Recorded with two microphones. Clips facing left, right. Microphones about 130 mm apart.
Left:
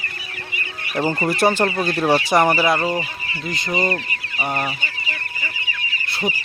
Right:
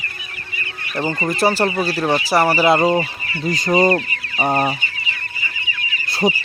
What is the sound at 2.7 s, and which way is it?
Fowl, 30° right (ahead or behind).